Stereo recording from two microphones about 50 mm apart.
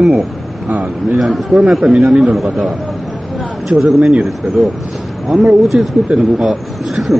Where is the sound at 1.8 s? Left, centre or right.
Centre.